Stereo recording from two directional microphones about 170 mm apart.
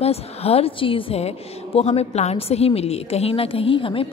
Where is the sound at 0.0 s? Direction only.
35° left (ahead or behind).